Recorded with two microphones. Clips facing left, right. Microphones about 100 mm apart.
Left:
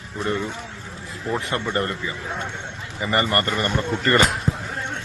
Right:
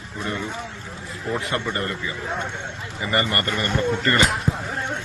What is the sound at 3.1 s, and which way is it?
Speech, 30° left (ahead or behind).